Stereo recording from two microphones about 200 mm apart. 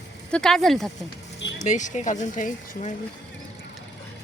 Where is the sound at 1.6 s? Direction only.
35° left (ahead or behind).